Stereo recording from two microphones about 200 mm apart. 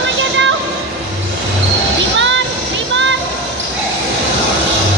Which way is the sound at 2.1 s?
65° right (ahead or behind).